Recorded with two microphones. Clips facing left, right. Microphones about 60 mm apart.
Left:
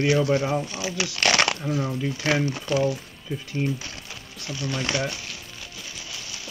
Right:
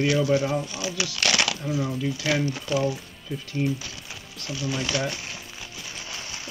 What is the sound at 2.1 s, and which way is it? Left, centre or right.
Speech, left.